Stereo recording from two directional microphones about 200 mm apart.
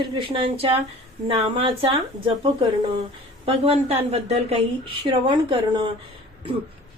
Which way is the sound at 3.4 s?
30° right (ahead or behind).